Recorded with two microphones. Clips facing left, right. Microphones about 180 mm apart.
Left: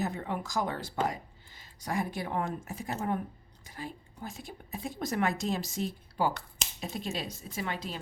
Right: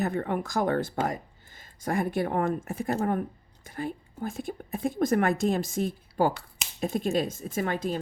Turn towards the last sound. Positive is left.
turn(degrees=-50)  # may be behind; listen again after turning